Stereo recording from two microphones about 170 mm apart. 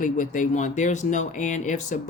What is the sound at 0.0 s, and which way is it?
Speech, 50° left (ahead or behind).